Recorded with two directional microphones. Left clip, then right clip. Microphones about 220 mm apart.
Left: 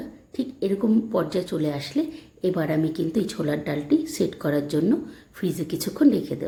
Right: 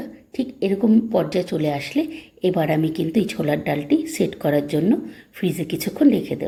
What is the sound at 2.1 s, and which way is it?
Speech, 35° left (ahead or behind).